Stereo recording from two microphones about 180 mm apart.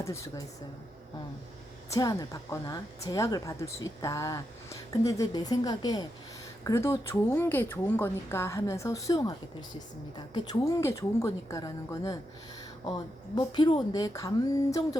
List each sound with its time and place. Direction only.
0.0 s speech: 15° left (ahead or behind)
1.9 s speech: 20° left (ahead or behind)
13.3 s speech: 25° left (ahead or behind)